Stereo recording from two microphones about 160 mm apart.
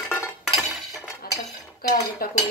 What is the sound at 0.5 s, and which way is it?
Chink, centre (ahead or behind).